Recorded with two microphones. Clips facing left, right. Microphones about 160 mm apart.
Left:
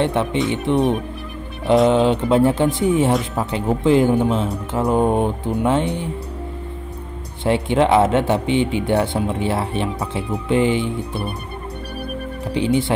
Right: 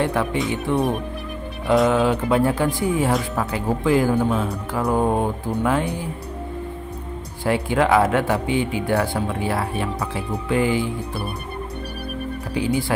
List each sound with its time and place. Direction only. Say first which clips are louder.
0.0 s speech: left 2 dB; 25° left (ahead or behind)
7.4 s speech: left 3 dB; 25° left (ahead or behind)
12.5 s speech: left 4 dB; 25° left (ahead or behind)